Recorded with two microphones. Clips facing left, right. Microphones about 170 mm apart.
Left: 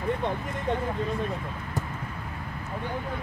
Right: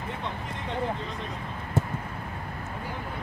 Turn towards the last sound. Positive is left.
turn(degrees=-25)  # may be behind; listen again after turning